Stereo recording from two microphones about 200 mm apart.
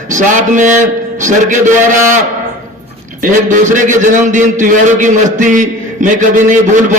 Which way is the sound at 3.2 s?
40° right (ahead or behind).